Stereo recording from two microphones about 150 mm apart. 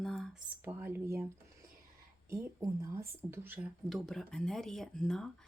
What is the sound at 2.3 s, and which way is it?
A woman's voice, 20° right (ahead or behind).